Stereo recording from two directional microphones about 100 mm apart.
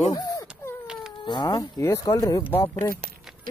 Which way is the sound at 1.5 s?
35° left (ahead or behind).